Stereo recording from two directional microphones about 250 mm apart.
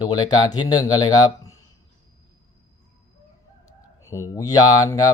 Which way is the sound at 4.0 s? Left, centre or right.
Centre.